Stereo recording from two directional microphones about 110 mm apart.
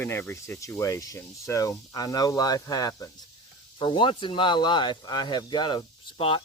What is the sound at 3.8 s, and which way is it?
Speech, 45° left (ahead or behind).